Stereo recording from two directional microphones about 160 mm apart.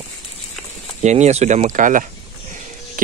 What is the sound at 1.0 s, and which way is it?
Speech, 45° right (ahead or behind).